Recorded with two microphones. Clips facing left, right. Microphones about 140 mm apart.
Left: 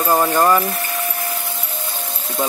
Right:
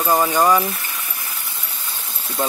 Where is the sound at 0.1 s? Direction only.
Centre (ahead or behind).